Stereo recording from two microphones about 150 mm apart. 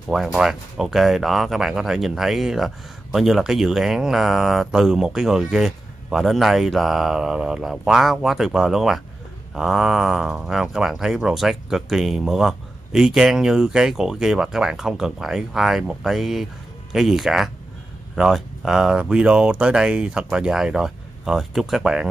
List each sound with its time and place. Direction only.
0.1 s speech: centre (ahead or behind)